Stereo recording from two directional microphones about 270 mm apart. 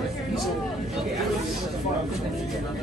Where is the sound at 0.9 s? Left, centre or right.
Centre.